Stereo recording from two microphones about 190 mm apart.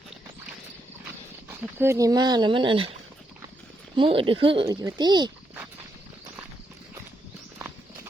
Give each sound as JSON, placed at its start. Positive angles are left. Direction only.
{"t": 1.5, "sound": "speech", "side_deg": -15}